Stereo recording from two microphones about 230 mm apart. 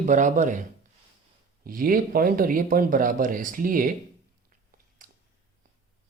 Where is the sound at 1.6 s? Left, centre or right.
Right.